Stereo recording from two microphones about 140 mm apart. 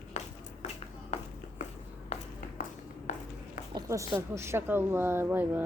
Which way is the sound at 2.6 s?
90° left.